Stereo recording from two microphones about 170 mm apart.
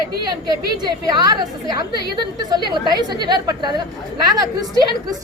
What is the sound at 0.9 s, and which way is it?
Speech, 25° right (ahead or behind).